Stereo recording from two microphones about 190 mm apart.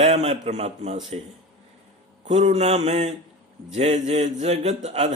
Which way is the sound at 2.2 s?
35° right (ahead or behind).